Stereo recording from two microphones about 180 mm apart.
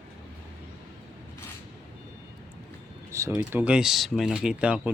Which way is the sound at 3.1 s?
15° right (ahead or behind).